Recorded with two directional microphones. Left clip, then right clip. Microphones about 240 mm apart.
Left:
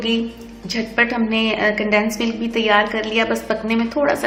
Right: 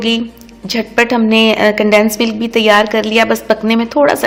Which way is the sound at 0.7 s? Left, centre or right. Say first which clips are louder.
Right 6 dB; right.